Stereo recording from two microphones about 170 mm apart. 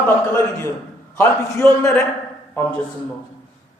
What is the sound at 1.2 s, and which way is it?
Speech, 15° left (ahead or behind).